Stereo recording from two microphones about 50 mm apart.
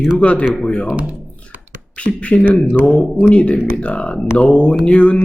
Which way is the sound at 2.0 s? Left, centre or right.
Left.